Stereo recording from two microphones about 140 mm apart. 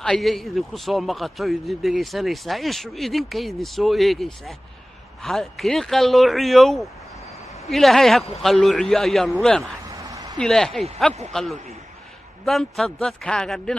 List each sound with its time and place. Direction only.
0.0 s a man's voice: 5° left (ahead or behind)
10.0 s a sound: 25° right (ahead or behind)
10.3 s a man's voice: 5° left (ahead or behind)
12.4 s a man's voice: centre (ahead or behind)